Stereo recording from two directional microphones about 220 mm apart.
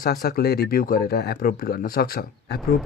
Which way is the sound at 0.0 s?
40° left (ahead or behind).